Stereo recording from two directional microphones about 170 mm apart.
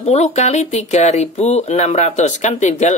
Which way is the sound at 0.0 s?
40° left (ahead or behind).